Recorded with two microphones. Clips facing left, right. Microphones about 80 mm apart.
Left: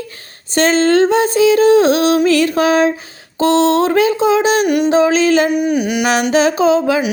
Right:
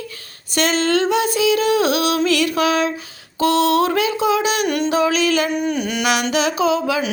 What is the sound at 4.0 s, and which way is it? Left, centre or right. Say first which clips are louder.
Speech: left 5 dB; left.